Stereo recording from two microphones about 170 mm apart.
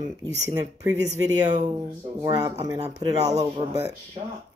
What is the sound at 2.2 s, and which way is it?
Speech, 25° right (ahead or behind).